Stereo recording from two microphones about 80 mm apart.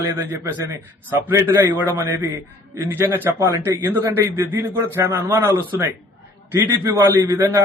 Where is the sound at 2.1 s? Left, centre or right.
Right.